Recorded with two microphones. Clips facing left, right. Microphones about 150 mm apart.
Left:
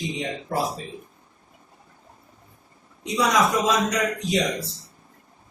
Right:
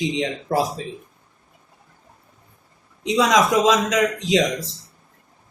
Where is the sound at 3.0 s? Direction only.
90° right.